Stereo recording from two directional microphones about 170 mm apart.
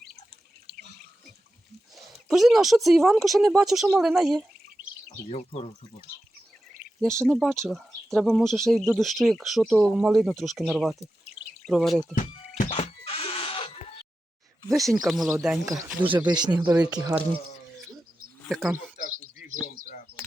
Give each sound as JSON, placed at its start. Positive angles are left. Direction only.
{"t": 2.0, "sound": "speech", "side_deg": 0}
{"t": 5.3, "sound": "speech", "side_deg": 40}
{"t": 7.3, "sound": "speech", "side_deg": 0}
{"t": 12.1, "sound": "music", "side_deg": 40}
{"t": 14.7, "sound": "speech", "side_deg": 0}
{"t": 15.6, "sound": "speech", "side_deg": -20}
{"t": 18.4, "sound": "speech", "side_deg": 0}